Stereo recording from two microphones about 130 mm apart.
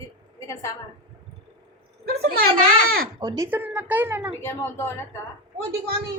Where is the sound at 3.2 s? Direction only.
30° right (ahead or behind).